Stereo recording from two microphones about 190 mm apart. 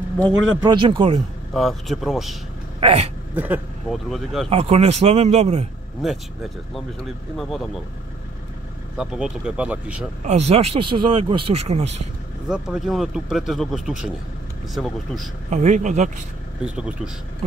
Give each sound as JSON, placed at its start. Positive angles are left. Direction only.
{"t": 0.2, "sound": "speech", "side_deg": -20}
{"t": 1.5, "sound": "a man's voice", "side_deg": 0}
{"t": 2.8, "sound": "speech", "side_deg": -30}
{"t": 3.3, "sound": "a man's voice", "side_deg": -10}
{"t": 4.5, "sound": "speech", "side_deg": -35}
{"t": 6.0, "sound": "a man's voice", "side_deg": 0}
{"t": 8.9, "sound": "a man's voice", "side_deg": -5}
{"t": 10.2, "sound": "speech", "side_deg": -35}
{"t": 12.4, "sound": "a man's voice", "side_deg": -5}
{"t": 15.5, "sound": "speech", "side_deg": -40}
{"t": 16.6, "sound": "a man's voice", "side_deg": -5}
{"t": 17.4, "sound": "a sound", "side_deg": -35}